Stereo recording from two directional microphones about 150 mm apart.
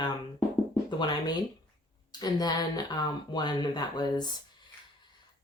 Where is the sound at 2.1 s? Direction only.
25° left (ahead or behind).